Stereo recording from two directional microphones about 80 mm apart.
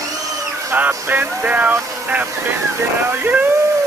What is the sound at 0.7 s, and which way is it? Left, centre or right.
Speech, right.